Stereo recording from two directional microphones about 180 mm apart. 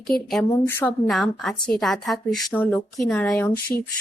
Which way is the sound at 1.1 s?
Centre (ahead or behind).